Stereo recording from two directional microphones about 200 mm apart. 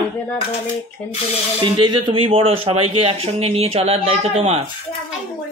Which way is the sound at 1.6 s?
20° right (ahead or behind).